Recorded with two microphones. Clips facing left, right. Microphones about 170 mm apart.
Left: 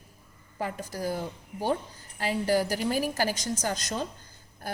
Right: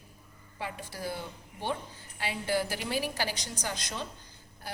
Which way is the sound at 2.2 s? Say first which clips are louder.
Left 5 dB; 40° left (ahead or behind).